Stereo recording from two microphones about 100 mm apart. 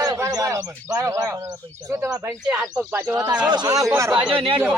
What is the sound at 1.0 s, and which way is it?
Speech, 30° right (ahead or behind).